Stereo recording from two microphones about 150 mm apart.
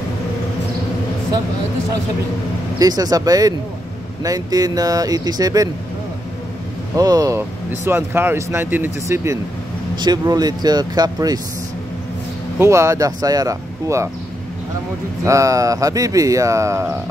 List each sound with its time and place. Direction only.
2.8 s speech: 25° right (ahead or behind)
7.0 s speech: 25° right (ahead or behind)
12.5 s speech: 20° right (ahead or behind)
15.2 s speech: 20° right (ahead or behind)